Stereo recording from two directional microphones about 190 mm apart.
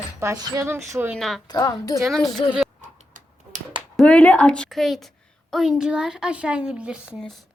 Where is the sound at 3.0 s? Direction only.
45° right (ahead or behind).